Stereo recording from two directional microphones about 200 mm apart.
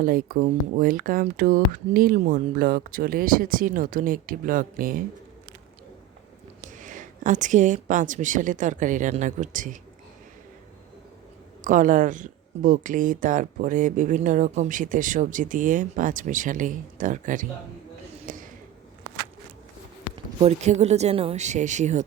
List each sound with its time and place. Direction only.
0.0 s speech: 45° right (ahead or behind)
6.6 s speech: 40° right (ahead or behind)
11.6 s speech: 40° right (ahead or behind)
18.3 s a sound: 40° right (ahead or behind)
19.1 s a sound: 60° right (ahead or behind)
20.1 s speech: 30° right (ahead or behind)